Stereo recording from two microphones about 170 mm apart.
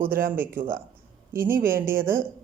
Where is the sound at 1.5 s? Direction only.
60° right (ahead or behind).